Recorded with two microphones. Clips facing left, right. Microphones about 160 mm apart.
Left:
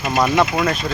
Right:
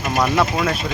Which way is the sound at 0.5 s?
Centre (ahead or behind).